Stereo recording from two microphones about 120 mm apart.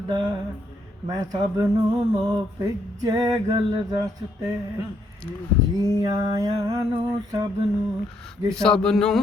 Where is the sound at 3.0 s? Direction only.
30° right (ahead or behind).